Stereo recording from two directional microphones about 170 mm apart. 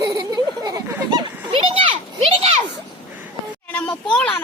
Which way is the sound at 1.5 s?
30° right (ahead or behind).